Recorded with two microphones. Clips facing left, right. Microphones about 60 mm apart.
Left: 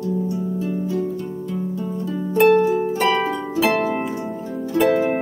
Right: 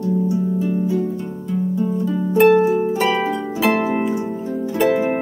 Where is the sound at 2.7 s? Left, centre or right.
Centre.